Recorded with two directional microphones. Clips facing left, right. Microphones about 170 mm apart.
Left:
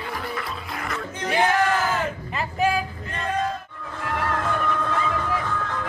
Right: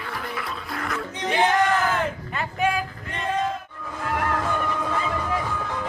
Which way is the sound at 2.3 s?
Centre (ahead or behind).